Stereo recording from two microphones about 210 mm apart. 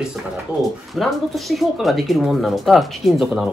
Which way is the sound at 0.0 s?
Centre (ahead or behind).